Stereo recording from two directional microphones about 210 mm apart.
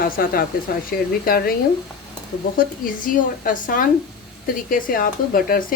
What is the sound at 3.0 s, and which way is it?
Speech, 40° left (ahead or behind).